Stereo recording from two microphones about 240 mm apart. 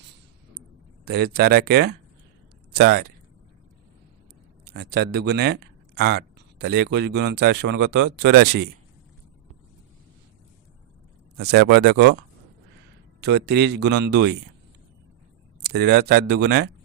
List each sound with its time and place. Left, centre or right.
1.0 s speech: right
4.6 s speech: right
11.3 s speech: right
13.2 s speech: right
15.6 s speech: right